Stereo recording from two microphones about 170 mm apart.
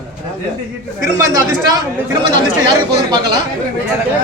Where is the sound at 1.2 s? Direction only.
15° right (ahead or behind).